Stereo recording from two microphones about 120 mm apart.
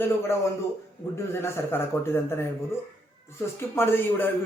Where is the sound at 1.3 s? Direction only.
20° left (ahead or behind).